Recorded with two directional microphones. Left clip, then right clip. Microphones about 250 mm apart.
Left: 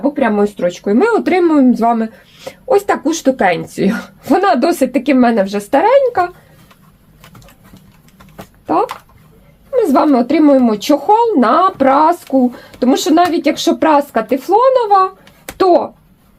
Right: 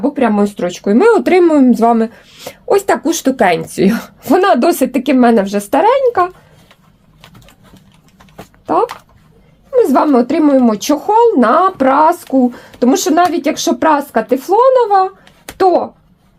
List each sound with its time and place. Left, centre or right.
0.2 s speech: right
8.6 s a woman's voice: right